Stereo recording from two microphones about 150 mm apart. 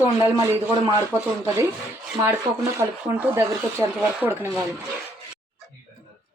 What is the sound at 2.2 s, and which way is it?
Speech, 20° right (ahead or behind).